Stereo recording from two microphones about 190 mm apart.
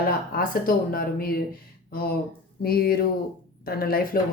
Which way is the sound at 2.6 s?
55° left (ahead or behind).